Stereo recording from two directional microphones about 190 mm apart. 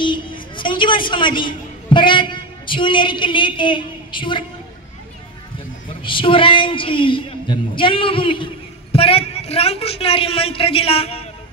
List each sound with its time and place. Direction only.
0.0 s a man's voice: 25° left (ahead or behind)
6.0 s a woman's voice: 25° left (ahead or behind)